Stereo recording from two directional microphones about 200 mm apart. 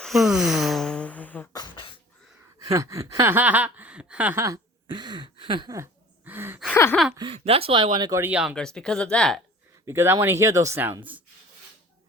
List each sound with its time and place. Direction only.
0.0 s a sound: centre (ahead or behind)
1.5 s beatboxing: 25° left (ahead or behind)
2.6 s a sound: 15° right (ahead or behind)
6.7 s gasp: 10° left (ahead or behind)
7.3 s speech: 30° right (ahead or behind); by 9.4 s 5° left (ahead or behind)
9.8 s speech: 15° right (ahead or behind)